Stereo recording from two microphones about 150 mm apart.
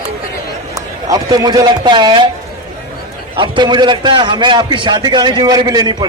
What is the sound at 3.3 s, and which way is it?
A man's voice, 35° right (ahead or behind).